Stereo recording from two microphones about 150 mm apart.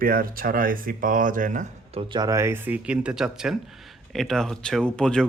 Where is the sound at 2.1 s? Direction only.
25° right (ahead or behind); by 5.2 s 5° left (ahead or behind).